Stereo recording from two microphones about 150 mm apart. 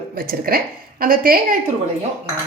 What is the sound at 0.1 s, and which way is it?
A woman's voice, 80° right.